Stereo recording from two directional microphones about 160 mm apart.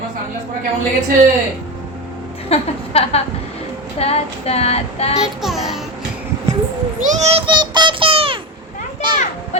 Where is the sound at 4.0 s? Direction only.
40° left (ahead or behind).